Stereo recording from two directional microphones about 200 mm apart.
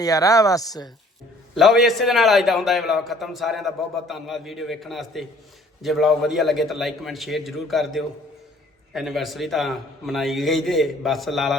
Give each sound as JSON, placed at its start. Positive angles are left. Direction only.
{"t": 0.0, "sound": "speech", "side_deg": 15}
{"t": 1.5, "sound": "a man's voice", "side_deg": 0}